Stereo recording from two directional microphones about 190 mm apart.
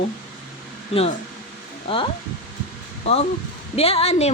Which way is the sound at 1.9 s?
30° left (ahead or behind).